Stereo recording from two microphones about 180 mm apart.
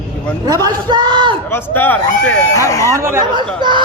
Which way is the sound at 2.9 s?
15° right (ahead or behind).